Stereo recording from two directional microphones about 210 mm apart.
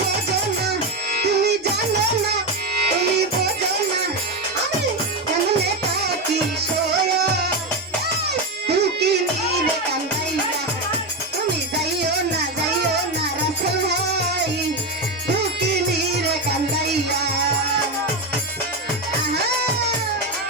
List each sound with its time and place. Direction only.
1.2 s music: 50° right (ahead or behind)
8.3 s music: 50° right (ahead or behind)